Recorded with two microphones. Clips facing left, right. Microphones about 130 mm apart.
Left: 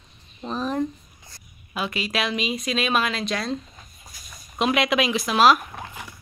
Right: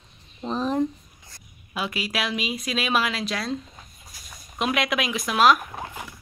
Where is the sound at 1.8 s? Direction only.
10° right (ahead or behind).